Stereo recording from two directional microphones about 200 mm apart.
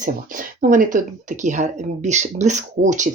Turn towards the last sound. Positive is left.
turn(degrees=-40)  # may be behind; listen again after turning